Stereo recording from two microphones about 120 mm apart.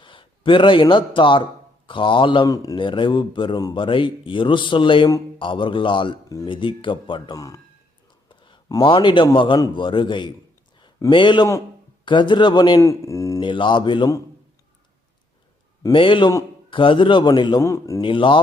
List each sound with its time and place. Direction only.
0.0 s a man's voice: 45° left (ahead or behind)
2.5 s speech: 30° left (ahead or behind)
2.7 s a man's voice: 45° left (ahead or behind)
6.2 s speech: 30° left (ahead or behind)
6.5 s a man's voice: 45° left (ahead or behind)
7.3 s speech: 30° left (ahead or behind)
8.3 s a sound: 45° left (ahead or behind)
8.7 s a man's voice: 40° left (ahead or behind)
12.8 s speech: 25° left (ahead or behind)
13.4 s a man's voice: 45° left (ahead or behind)
15.9 s a man's voice: 45° left (ahead or behind)
17.6 s speech: 25° left (ahead or behind)
18.0 s a man's voice: 45° left (ahead or behind)